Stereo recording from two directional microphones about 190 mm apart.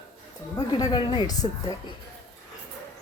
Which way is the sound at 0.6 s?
20° left (ahead or behind).